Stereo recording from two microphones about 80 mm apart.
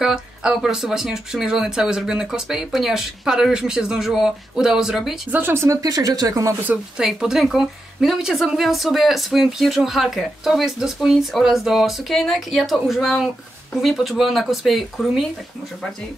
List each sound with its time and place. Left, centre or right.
0.0 s speech: centre
5.3 s speech: right
5.8 s speech: right
7.0 s speech: centre